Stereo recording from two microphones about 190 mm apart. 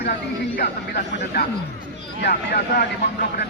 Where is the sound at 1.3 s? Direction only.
60° left (ahead or behind).